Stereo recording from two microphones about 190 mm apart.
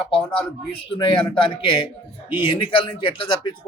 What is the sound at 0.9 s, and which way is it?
Speech, 25° left (ahead or behind).